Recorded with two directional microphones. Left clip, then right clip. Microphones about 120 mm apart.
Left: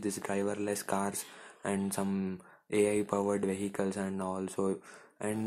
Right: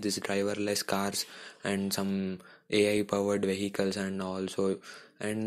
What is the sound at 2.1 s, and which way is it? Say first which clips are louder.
Speech: right 2 dB; 10° right (ahead or behind).